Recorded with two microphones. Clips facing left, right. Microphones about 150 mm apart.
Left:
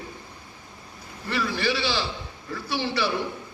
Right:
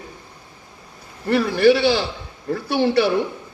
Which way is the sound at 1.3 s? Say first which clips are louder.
Right 11 dB; 50° right (ahead or behind).